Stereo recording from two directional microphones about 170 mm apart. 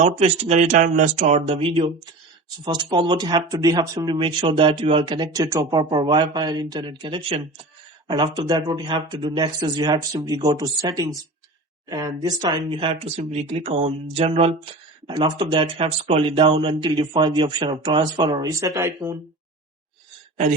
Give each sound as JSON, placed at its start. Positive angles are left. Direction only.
{"t": 0.0, "sound": "speech", "side_deg": -40}